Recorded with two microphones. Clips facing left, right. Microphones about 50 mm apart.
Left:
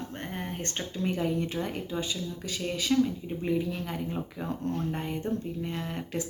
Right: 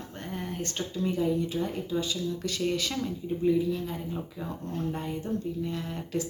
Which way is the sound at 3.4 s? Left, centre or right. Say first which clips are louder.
Right 4 dB; left.